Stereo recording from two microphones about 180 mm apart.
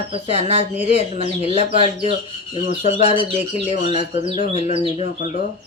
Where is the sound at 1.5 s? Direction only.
30° right (ahead or behind).